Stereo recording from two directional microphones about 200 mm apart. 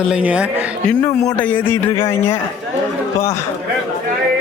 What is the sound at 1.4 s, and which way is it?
A man's voice, 10° left (ahead or behind).